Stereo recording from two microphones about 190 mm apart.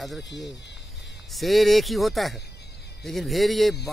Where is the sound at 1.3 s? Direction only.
Centre (ahead or behind).